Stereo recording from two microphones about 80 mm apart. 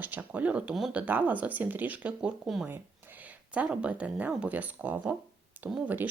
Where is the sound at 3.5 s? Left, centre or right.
Centre.